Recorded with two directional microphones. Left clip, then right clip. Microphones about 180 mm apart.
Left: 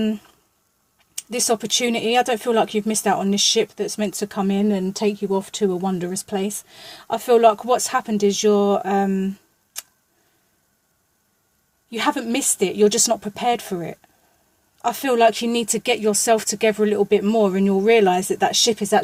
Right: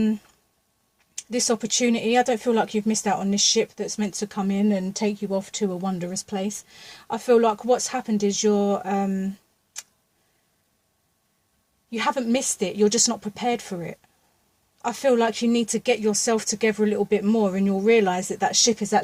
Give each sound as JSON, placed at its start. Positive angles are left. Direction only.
{"t": 1.1, "sound": "speech", "side_deg": 50}
{"t": 9.7, "sound": "tick-tock", "side_deg": 50}
{"t": 11.9, "sound": "speech", "side_deg": 50}